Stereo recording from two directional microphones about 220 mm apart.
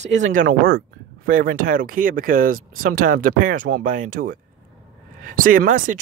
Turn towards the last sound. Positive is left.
turn(degrees=-40)  # may be behind; listen again after turning